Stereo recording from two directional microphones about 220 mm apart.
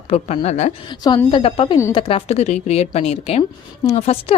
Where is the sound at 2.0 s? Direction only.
25° left (ahead or behind).